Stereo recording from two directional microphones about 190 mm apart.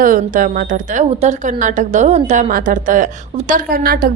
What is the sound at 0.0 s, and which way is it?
A woman's voice, 45° right (ahead or behind).